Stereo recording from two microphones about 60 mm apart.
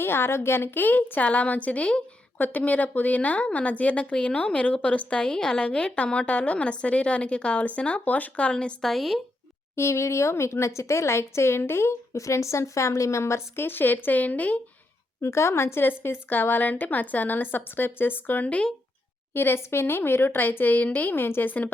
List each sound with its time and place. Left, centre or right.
0.0 s a woman's voice: left; by 8.8 s centre
8.8 s speech: centre
9.7 s speech: left
13.6 s a woman's voice: left
15.2 s a woman's voice: left
18.4 s a woman's voice: left
19.3 s a woman's voice: left